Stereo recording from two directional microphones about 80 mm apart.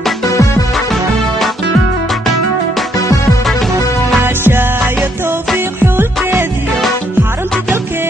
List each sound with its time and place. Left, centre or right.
4.2 s music: right